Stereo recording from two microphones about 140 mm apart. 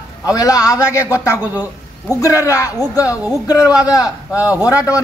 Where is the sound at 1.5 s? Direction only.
10° right (ahead or behind).